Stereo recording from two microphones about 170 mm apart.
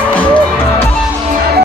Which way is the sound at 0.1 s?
10° left (ahead or behind).